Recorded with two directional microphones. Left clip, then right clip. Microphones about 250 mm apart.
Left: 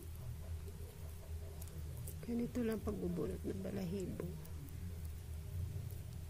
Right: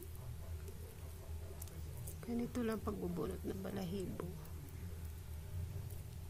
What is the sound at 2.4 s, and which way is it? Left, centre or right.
Speech, right.